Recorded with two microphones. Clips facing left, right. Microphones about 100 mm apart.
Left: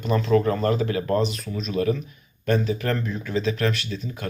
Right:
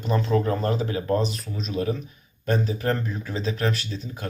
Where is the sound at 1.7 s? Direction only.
20° right (ahead or behind).